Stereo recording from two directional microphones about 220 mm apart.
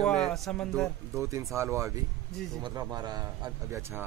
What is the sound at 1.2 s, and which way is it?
Speech, 15° right (ahead or behind).